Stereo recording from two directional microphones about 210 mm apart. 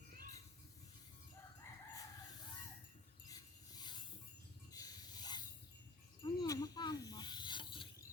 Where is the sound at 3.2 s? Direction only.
20° left (ahead or behind).